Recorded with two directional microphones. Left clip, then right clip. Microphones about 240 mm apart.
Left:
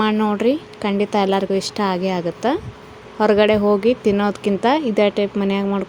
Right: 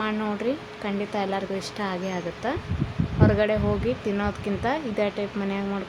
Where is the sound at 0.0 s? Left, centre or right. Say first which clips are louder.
Left 9 dB; left.